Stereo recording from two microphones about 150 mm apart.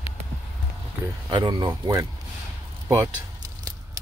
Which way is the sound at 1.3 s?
30° right (ahead or behind).